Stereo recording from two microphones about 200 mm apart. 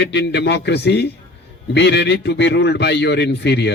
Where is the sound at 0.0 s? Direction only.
60° left (ahead or behind).